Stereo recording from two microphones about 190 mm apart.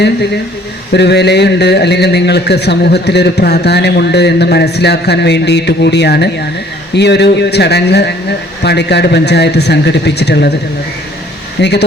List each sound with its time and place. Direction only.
0.9 s a man's voice: 60° left (ahead or behind)
11.6 s a man's voice: 60° left (ahead or behind)